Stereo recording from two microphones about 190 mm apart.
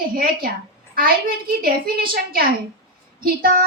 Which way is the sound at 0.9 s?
50° right (ahead or behind).